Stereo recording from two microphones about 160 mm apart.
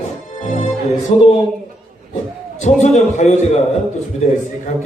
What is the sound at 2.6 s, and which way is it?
Speech, 45° left (ahead or behind).